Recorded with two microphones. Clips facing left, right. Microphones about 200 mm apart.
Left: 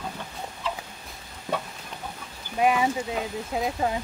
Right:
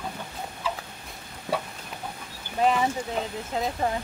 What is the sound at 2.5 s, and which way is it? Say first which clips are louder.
Speech: left 1 dB; 10° left (ahead or behind).